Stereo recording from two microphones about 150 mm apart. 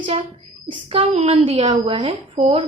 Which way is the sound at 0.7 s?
35° right (ahead or behind).